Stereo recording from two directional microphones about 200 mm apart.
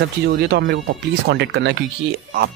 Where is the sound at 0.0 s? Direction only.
55° right (ahead or behind).